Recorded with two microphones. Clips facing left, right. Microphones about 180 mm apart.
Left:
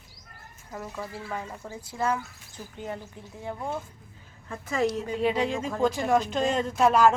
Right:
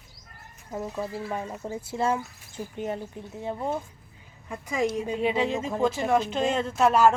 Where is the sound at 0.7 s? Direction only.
20° right (ahead or behind).